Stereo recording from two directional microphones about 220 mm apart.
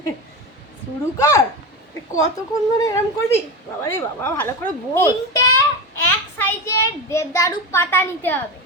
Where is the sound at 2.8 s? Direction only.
15° left (ahead or behind).